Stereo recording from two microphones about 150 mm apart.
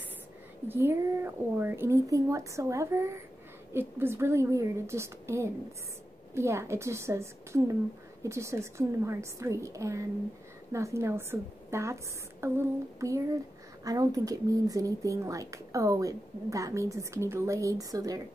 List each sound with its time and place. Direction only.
0.7 s a woman's voice: 15° right (ahead or behind)